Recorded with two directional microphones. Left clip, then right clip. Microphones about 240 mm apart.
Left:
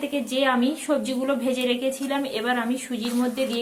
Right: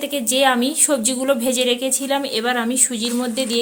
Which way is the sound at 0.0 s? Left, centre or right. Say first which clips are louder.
Right 6 dB; right.